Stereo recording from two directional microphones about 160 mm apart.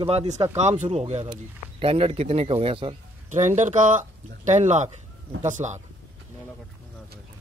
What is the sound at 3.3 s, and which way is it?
Speech, 50° right (ahead or behind).